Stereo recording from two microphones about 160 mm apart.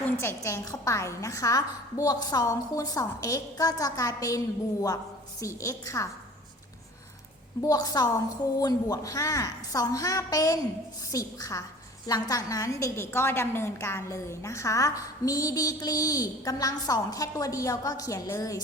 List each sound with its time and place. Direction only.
0.0 s a woman's voice: 15° left (ahead or behind)
7.6 s a woman's voice: 25° left (ahead or behind)